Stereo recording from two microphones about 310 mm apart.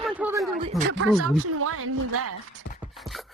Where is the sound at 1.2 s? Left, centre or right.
Right.